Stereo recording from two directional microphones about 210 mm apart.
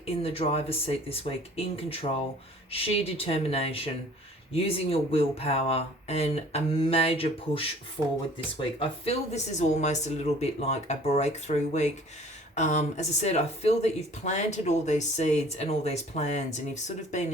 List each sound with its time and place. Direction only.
0.0 s speech: 25° left (ahead or behind)
8.8 s speech: 30° left (ahead or behind)